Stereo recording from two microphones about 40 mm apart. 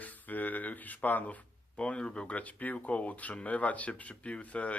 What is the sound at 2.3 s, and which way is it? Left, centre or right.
Speech, left.